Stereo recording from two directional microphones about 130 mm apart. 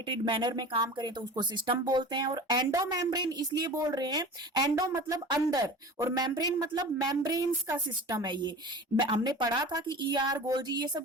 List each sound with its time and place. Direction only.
0.1 s a woman's voice: 40° right (ahead or behind)